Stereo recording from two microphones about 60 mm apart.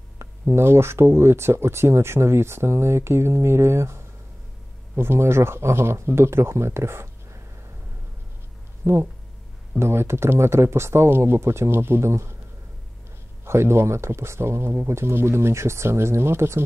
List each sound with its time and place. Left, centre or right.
0.2 s speech: right
8.8 s speech: right
13.5 s speech: right